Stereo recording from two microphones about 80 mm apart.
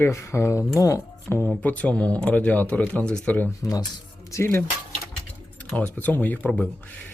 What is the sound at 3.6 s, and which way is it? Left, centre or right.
Speech, left.